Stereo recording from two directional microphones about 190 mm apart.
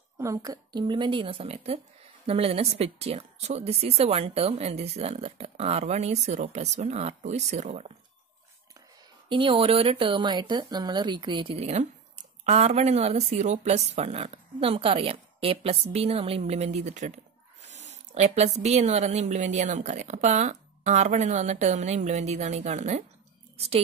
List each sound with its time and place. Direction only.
0.2 s speech: 15° right (ahead or behind); by 7.9 s 35° right (ahead or behind)
9.3 s speech: 25° right (ahead or behind)